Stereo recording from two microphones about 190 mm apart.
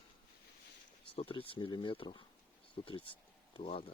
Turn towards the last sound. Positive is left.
turn(degrees=30)  # may be behind; listen again after turning